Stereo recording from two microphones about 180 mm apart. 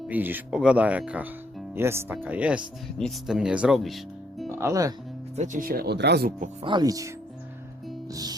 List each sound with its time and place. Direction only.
0.1 s speech: 10° right (ahead or behind)
4.4 s speech: 15° right (ahead or behind)
5.4 s speech: 50° right (ahead or behind); by 6.3 s 65° right (ahead or behind)
6.7 s speech: 20° right (ahead or behind)
8.1 s speech: 20° right (ahead or behind)